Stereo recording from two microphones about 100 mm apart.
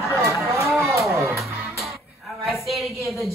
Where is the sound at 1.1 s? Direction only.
30° right (ahead or behind).